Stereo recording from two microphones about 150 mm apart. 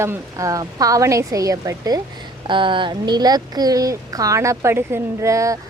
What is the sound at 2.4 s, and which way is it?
Speech, 35° right (ahead or behind).